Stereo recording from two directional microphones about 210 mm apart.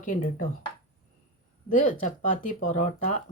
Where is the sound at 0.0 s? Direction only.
40° left (ahead or behind).